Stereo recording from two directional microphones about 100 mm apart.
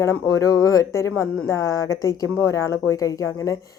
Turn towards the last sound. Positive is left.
turn(degrees=35)  # may be behind; listen again after turning